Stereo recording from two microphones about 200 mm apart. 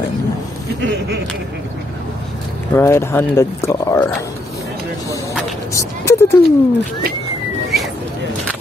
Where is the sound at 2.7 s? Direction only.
10° left (ahead or behind).